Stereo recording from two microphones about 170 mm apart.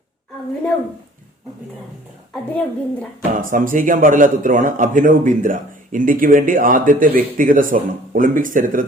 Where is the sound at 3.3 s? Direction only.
50° right (ahead or behind).